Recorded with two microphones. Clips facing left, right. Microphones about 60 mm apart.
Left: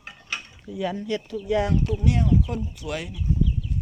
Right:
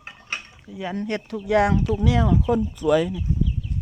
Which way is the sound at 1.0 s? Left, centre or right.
Right.